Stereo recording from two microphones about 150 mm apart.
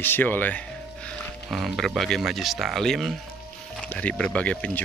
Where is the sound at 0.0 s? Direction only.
15° left (ahead or behind).